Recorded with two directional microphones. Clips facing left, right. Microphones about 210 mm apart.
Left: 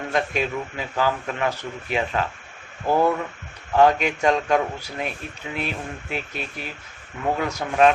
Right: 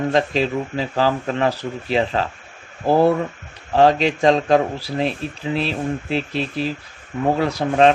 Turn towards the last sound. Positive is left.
turn(degrees=-35)  # may be behind; listen again after turning